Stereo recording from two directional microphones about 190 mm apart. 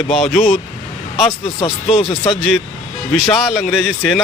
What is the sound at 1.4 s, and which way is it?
Speech, 30° left (ahead or behind).